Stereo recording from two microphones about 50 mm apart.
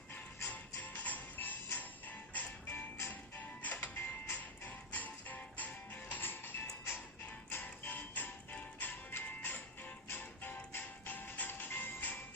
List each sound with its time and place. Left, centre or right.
0.4 s music: left